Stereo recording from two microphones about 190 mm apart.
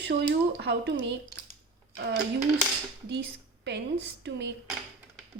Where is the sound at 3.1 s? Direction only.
65° right (ahead or behind).